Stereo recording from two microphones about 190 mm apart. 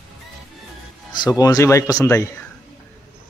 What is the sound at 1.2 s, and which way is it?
Speech, 20° left (ahead or behind).